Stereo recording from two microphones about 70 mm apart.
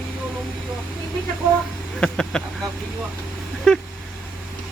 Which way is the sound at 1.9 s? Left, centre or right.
Centre.